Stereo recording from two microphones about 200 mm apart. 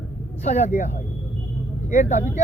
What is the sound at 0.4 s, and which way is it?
Speech, 35° left (ahead or behind).